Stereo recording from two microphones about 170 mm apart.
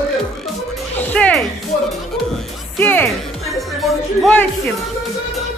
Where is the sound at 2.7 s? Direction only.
10° left (ahead or behind).